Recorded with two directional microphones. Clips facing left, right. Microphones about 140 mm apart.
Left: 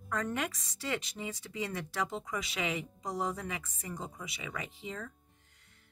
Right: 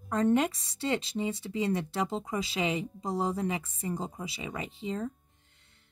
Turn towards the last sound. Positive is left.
turn(degrees=-25)  # may be behind; listen again after turning